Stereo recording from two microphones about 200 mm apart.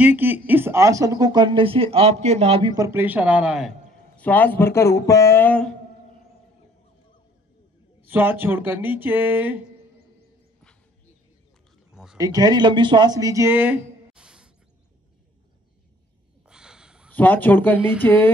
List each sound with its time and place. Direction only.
0.0 s speech: 10° right (ahead or behind); by 2.7 s 30° right (ahead or behind)
2.7 s speech: 15° right (ahead or behind)
4.2 s speech: 10° left (ahead or behind)
8.0 s speech: 10° right (ahead or behind)
11.9 s a sound: 5° right (ahead or behind)
12.2 s speech: 20° right (ahead or behind)
16.4 s snort: 5° right (ahead or behind)
17.1 s speech: 10° left (ahead or behind)